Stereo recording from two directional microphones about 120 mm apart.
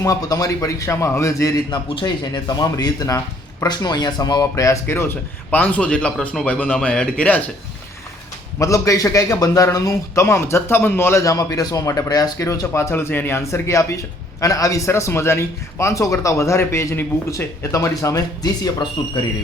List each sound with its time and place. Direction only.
0.0 s a man's voice: 30° left (ahead or behind)
2.0 s speech: 40° left (ahead or behind); by 7.4 s 10° left (ahead or behind)
8.5 s a man's voice: 25° left (ahead or behind)